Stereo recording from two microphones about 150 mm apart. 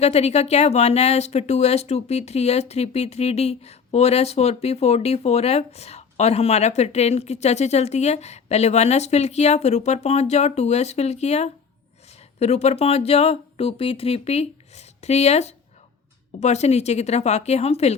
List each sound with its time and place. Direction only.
0.0 s speech: 45° left (ahead or behind)